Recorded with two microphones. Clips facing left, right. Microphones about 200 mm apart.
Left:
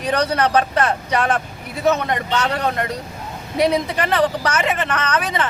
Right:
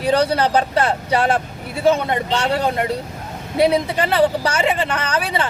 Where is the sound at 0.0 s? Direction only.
30° right (ahead or behind).